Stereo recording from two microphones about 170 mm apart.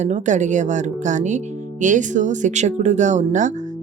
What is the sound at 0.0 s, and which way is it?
Speech, 45° right (ahead or behind).